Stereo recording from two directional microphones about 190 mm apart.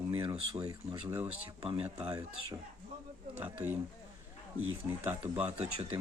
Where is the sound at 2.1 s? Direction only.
15° right (ahead or behind).